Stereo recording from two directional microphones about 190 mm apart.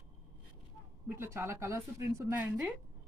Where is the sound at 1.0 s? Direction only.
10° right (ahead or behind).